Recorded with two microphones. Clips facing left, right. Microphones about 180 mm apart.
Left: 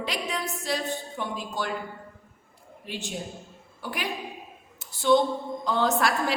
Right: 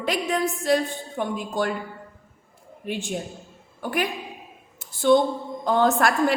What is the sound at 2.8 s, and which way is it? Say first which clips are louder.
A woman's voice: right 6 dB; 50° right (ahead or behind).